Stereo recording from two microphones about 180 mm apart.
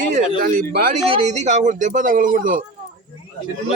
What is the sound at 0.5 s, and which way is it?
Speech, 55° right (ahead or behind).